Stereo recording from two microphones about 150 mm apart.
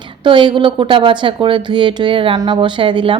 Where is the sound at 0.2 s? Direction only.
30° right (ahead or behind).